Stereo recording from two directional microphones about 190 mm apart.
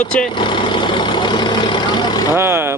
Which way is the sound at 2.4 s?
15° right (ahead or behind).